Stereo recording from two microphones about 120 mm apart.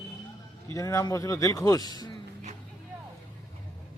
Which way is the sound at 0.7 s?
25° left (ahead or behind).